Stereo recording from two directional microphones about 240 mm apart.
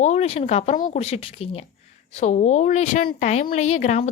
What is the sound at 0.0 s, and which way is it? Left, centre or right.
A woman's voice, left.